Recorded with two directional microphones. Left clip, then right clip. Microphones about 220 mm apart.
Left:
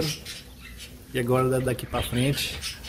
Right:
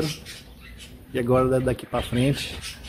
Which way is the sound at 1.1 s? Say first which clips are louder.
Right 3 dB; 30° right (ahead or behind).